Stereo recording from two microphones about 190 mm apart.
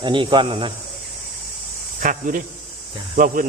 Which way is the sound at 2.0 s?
45° right (ahead or behind).